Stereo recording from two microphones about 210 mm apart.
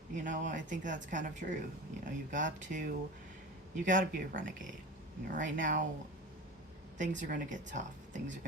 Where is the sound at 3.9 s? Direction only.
40° right (ahead or behind).